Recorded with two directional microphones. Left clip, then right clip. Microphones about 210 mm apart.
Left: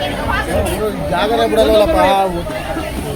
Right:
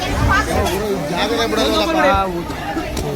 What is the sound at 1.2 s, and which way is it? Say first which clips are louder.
Speech: left 6 dB; 45° left (ahead or behind).